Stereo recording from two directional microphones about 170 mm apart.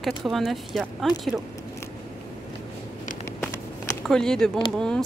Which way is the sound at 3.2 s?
15° left (ahead or behind).